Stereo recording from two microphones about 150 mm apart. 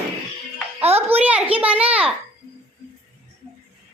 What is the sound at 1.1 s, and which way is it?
A child's voice, 10° right (ahead or behind).